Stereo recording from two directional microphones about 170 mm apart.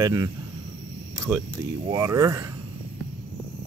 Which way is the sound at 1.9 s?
15° right (ahead or behind).